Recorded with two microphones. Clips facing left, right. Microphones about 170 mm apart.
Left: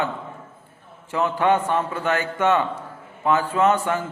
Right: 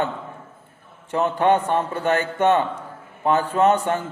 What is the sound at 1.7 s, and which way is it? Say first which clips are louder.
Speech: right 1 dB; 35° right (ahead or behind).